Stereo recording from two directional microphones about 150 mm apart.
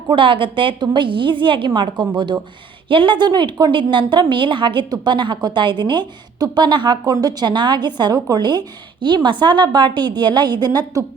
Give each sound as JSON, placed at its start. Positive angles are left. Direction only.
{"t": 0.1, "sound": "a woman's voice", "side_deg": -35}